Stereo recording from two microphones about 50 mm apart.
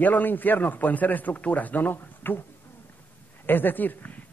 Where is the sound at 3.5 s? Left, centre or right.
Left.